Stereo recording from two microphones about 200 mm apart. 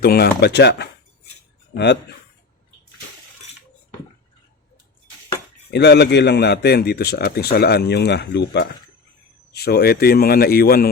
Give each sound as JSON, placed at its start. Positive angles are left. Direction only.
{"t": 0.0, "sound": "a man's voice", "side_deg": 50}
{"t": 5.7, "sound": "a man's voice", "side_deg": 55}